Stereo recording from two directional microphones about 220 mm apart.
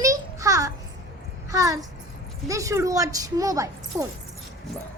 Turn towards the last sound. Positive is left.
turn(degrees=-15)  # may be behind; listen again after turning